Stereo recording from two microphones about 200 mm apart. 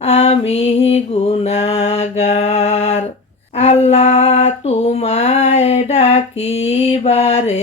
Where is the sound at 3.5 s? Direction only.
35° left (ahead or behind).